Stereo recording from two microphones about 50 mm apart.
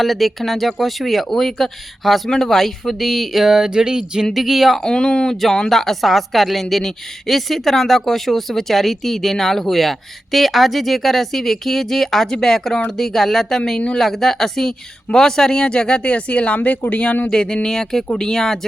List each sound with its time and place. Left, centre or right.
0.0 s a woman's voice: centre
4.4 s a woman's voice: centre
4.8 s speech: centre
5.4 s a woman's voice: centre
13.7 s speech: centre
14.0 s a woman's voice: centre